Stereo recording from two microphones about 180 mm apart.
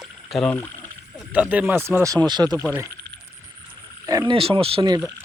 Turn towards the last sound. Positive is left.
turn(degrees=-25)  # may be behind; listen again after turning